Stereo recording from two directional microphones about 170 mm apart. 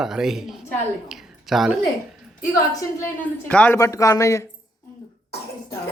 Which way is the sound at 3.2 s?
10° left (ahead or behind).